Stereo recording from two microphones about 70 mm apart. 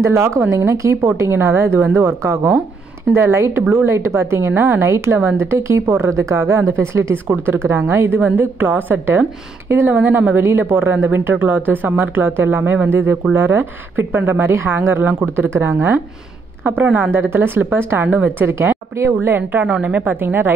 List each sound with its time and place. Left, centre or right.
0.0 s a woman's voice: right
3.6 s speech: right
3.9 s a woman's voice: right
8.4 s speech: right
9.9 s a woman's voice: right
18.5 s speech: right
19.2 s speech: right